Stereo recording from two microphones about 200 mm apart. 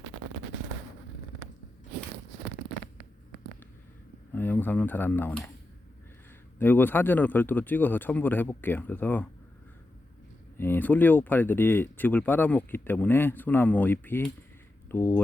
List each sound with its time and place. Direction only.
4.3 s speech: 10° left (ahead or behind)
6.6 s speech: 10° left (ahead or behind)
10.6 s speech: 10° left (ahead or behind)